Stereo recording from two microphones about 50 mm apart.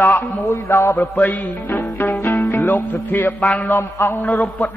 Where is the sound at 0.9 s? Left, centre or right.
Left.